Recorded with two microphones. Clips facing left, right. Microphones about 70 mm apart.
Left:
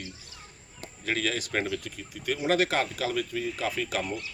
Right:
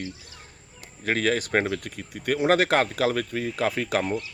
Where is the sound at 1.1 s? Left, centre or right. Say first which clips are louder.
Right 6 dB; right.